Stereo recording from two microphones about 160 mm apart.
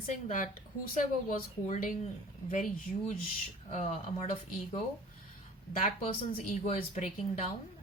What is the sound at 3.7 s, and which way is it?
A woman's voice, 45° left (ahead or behind).